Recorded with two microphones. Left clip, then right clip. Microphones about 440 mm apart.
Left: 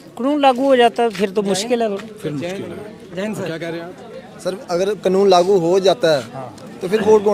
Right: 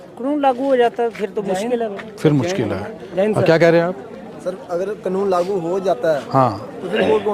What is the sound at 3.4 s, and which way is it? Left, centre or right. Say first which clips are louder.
Speech: right 13 dB; right.